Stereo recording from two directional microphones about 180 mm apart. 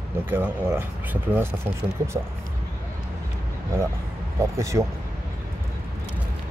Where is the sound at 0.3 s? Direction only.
10° right (ahead or behind).